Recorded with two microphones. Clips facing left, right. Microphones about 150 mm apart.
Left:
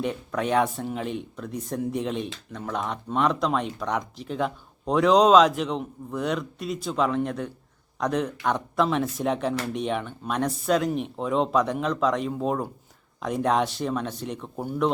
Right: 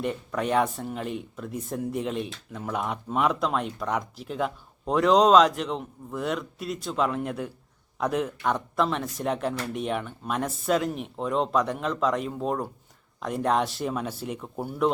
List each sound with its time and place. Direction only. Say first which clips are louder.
0.0 s speech: left 1 dB; centre (ahead or behind)